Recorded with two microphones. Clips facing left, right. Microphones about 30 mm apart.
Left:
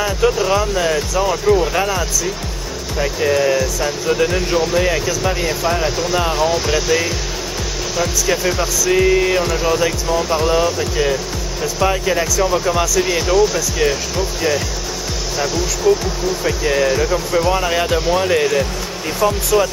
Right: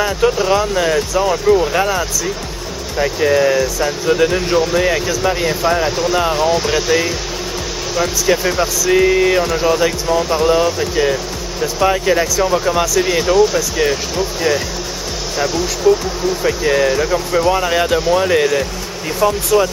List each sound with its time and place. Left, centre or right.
0.0 s speech: centre